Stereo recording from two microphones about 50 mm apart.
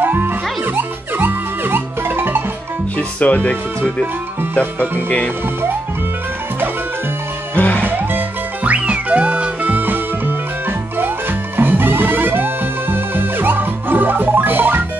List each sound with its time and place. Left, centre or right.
0.0 s music: right
3.0 s speech: left
7.5 s music: left
7.8 s music: right
8.6 s music: right